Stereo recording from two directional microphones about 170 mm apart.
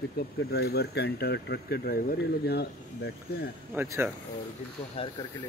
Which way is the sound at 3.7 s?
10° right (ahead or behind).